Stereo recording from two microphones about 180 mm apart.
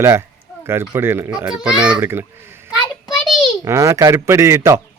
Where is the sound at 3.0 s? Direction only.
Centre (ahead or behind).